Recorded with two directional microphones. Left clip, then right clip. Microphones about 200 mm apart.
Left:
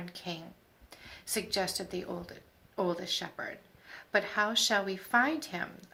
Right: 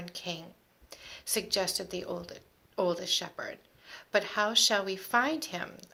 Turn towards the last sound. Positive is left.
turn(degrees=-55)  # may be behind; listen again after turning